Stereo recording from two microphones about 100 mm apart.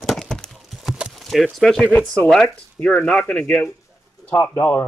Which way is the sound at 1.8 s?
15° left (ahead or behind).